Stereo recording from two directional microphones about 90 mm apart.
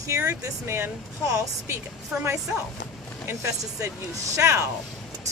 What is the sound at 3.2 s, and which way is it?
A woman's voice, 30° right (ahead or behind).